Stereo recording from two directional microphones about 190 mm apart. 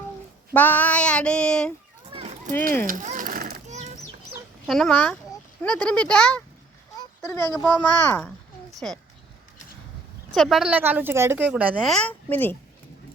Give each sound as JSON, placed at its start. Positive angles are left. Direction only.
{"t": 0.5, "sound": "female singing", "side_deg": 10}
{"t": 2.1, "sound": "children playing", "side_deg": -35}
{"t": 2.8, "sound": "a sound", "side_deg": -40}
{"t": 4.6, "sound": "female singing", "side_deg": 0}
{"t": 7.0, "sound": "a child's voice", "side_deg": 15}
{"t": 10.3, "sound": "a woman's voice", "side_deg": 0}